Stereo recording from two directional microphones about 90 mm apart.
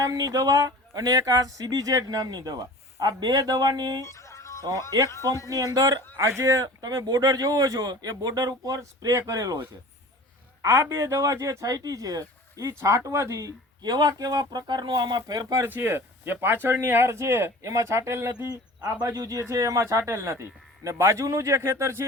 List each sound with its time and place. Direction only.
0.0 s speech: 40° right (ahead or behind)
4.0 s music: 35° left (ahead or behind)
4.7 s speech: 35° left (ahead or behind)
5.5 s speech: 45° right (ahead or behind)
6.1 s speech: 35° right (ahead or behind)
10.6 s speech: 35° right (ahead or behind)
15.6 s speech: 25° right (ahead or behind)
18.3 s speech: 40° right (ahead or behind)